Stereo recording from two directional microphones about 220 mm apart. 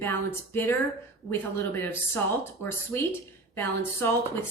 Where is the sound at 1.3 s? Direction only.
10° left (ahead or behind).